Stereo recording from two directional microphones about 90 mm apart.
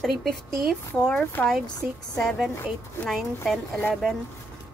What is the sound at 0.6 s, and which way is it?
Speech, centre (ahead or behind).